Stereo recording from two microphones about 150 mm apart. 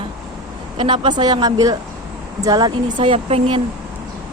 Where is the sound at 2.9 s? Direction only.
35° right (ahead or behind).